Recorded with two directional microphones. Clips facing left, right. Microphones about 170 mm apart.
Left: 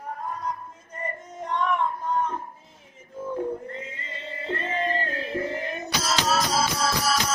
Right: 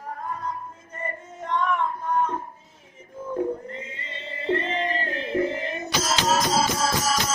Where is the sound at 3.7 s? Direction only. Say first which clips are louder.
Even; 25° right (ahead or behind).